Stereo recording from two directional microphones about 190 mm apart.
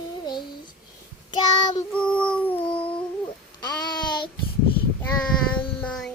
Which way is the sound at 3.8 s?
20° left (ahead or behind).